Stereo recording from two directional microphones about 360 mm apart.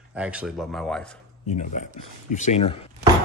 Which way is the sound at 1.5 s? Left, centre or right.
Left.